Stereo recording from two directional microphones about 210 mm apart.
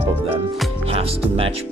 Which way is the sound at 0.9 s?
25° right (ahead or behind).